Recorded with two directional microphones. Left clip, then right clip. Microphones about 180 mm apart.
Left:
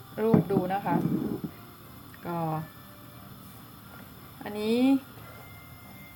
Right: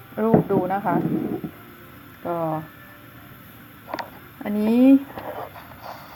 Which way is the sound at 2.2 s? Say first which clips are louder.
Right 7 dB; 20° right (ahead or behind).